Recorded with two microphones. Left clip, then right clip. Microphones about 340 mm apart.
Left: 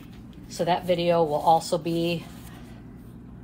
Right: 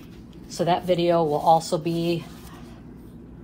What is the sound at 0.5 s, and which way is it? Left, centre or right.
Speech, centre.